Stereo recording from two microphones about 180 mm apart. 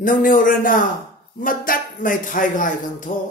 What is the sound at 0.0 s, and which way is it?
Speech, 50° left (ahead or behind).